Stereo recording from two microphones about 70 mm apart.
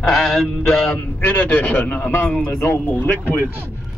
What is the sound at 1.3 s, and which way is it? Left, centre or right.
Speech, left.